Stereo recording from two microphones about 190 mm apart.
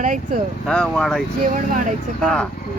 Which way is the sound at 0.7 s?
5° left (ahead or behind).